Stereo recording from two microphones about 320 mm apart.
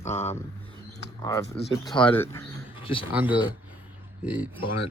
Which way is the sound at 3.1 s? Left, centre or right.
Centre.